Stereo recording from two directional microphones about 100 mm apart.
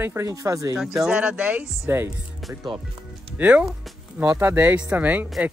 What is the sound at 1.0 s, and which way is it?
Speech, 10° right (ahead or behind).